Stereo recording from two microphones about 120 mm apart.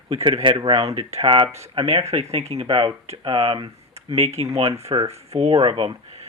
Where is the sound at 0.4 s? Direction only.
40° right (ahead or behind).